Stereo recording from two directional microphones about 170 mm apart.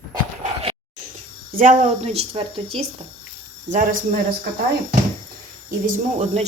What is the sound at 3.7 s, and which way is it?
Speech, 50° right (ahead or behind).